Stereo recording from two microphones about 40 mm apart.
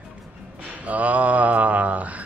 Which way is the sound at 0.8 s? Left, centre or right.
Right.